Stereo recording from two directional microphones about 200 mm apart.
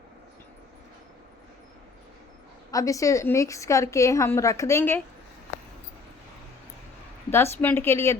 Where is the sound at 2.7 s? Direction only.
15° left (ahead or behind).